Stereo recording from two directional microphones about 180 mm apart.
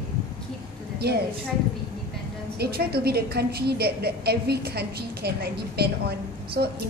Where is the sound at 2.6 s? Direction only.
60° right (ahead or behind).